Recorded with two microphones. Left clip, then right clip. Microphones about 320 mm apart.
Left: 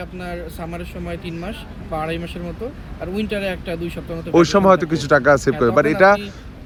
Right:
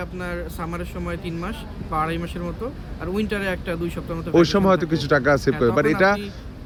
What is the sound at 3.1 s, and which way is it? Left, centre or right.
Speech, centre.